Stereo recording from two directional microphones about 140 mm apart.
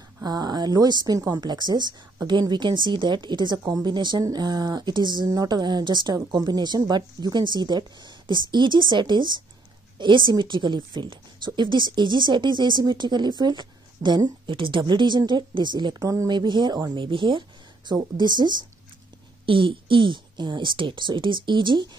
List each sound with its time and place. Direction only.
0.2 s speech: 30° right (ahead or behind)